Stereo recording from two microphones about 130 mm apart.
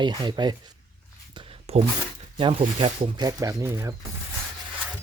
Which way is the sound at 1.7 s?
55° right (ahead or behind).